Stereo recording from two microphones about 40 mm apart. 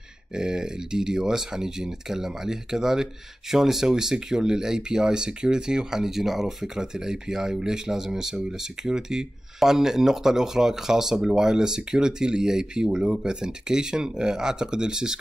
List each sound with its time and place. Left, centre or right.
0.3 s speech: centre